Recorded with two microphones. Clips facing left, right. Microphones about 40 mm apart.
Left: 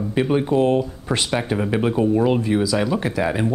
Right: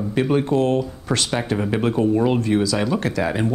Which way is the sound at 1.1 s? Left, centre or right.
Centre.